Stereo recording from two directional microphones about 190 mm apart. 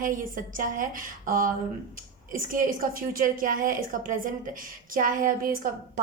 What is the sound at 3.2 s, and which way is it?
A woman's voice, 45° right (ahead or behind).